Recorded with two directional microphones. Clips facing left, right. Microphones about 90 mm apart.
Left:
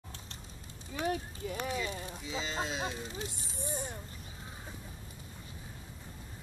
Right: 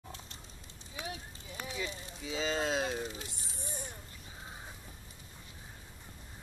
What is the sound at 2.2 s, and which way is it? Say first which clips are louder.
Speech: right 4 dB; 50° right (ahead or behind).